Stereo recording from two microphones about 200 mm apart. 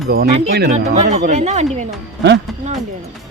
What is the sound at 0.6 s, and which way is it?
Speech, 35° right (ahead or behind).